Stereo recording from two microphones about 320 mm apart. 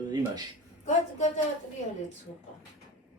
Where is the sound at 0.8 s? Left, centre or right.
Left.